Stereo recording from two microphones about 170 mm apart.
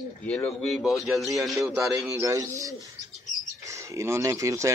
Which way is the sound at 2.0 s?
20° right (ahead or behind).